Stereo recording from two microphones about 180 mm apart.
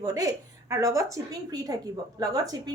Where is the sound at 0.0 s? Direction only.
20° right (ahead or behind).